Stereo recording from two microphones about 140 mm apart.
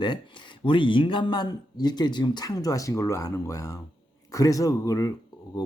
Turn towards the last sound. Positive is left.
turn(degrees=25)  # may be behind; listen again after turning